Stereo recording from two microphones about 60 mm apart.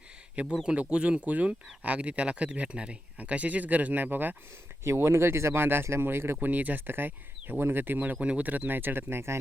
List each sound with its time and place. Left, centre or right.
0.5 s speech: centre; by 4.4 s right
4.8 s speech: right
6.5 s speech: right